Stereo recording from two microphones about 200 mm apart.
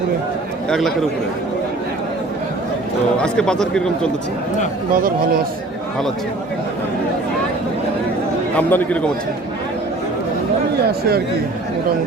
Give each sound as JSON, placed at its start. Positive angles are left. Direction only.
{"t": 0.7, "sound": "speech", "side_deg": 0}
{"t": 3.2, "sound": "speech", "side_deg": 5}
{"t": 4.9, "sound": "speech", "side_deg": -45}
{"t": 8.5, "sound": "speech", "side_deg": 10}